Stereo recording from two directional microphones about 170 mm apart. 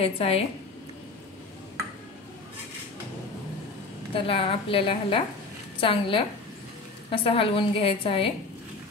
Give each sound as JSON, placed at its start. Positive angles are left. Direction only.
{"t": 0.0, "sound": "a woman's voice", "side_deg": 35}
{"t": 4.1, "sound": "a woman's voice", "side_deg": 30}